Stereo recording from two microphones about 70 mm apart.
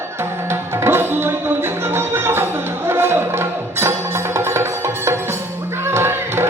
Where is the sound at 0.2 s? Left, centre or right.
Right.